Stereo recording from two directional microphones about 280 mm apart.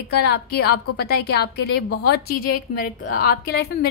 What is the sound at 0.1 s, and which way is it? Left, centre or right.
A woman's voice, left.